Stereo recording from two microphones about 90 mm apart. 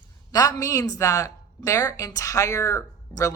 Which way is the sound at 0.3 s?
40° left (ahead or behind).